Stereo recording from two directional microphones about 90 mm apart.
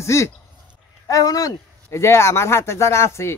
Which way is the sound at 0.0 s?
35° left (ahead or behind).